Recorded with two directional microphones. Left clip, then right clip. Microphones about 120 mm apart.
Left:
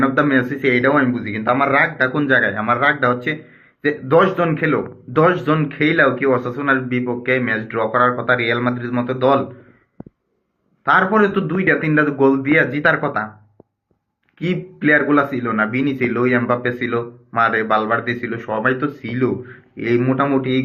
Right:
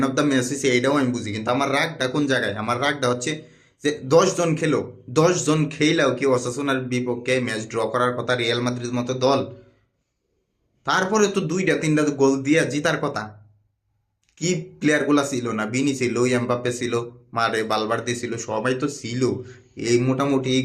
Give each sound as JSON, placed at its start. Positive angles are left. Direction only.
{"t": 0.0, "sound": "a man's voice", "side_deg": -45}
{"t": 10.8, "sound": "speech", "side_deg": -45}
{"t": 14.3, "sound": "speech", "side_deg": -45}